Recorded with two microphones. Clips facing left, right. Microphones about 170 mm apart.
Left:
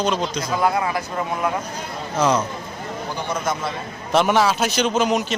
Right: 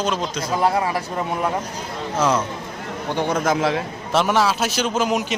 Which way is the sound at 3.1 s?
90° right.